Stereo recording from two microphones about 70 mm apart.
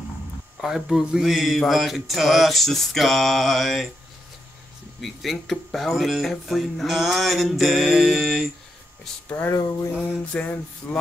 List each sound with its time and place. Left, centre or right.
0.6 s speech: centre
5.0 s speech: centre
9.9 s music: centre
10.8 s a sound: left